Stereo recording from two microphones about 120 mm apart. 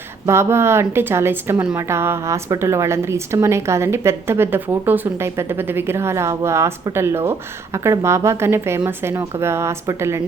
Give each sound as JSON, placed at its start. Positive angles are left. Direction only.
{"t": 0.3, "sound": "a woman's voice", "side_deg": -20}